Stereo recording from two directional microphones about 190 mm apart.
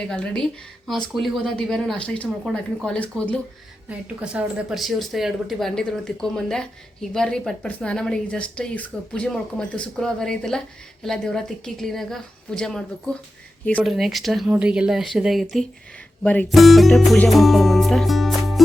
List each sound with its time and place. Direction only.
0.1 s speech: 5° left (ahead or behind)
2.2 s speech: 5° right (ahead or behind)
3.8 s speech: 5° right (ahead or behind)